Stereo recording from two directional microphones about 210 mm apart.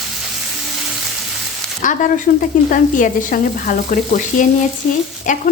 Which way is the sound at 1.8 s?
40° left (ahead or behind).